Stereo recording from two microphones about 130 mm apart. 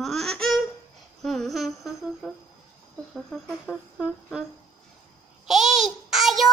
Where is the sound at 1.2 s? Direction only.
5° left (ahead or behind).